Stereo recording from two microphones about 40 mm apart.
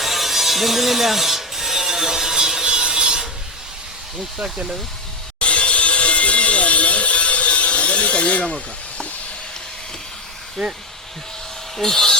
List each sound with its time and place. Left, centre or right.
0.0 s mechanisms: centre; by 3.2 s right
5.4 s a sound: left
10.6 s speech: centre
11.8 s speech: centre